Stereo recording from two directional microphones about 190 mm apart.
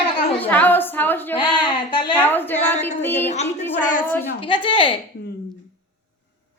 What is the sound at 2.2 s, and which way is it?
Speech, 10° left (ahead or behind).